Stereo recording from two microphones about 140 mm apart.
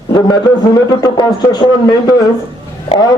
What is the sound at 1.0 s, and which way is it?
A man's voice, 30° left (ahead or behind).